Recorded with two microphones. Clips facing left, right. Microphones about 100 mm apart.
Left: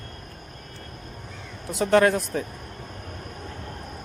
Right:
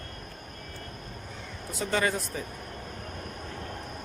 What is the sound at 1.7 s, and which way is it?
Speech, 65° left (ahead or behind).